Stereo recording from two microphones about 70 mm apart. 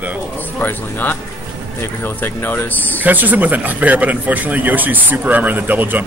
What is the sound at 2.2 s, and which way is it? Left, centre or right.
Speech, left.